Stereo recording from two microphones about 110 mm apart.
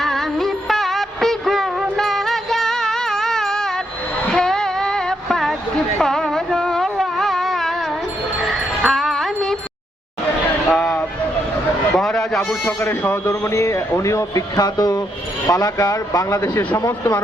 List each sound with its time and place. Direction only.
0.0 s music: centre (ahead or behind)
4.3 s a sound: 5° left (ahead or behind)
8.9 s music: centre (ahead or behind)
10.8 s vehicle: 5° left (ahead or behind)
11.9 s a sound: 5° left (ahead or behind)
12.6 s a man's voice: 20° left (ahead or behind)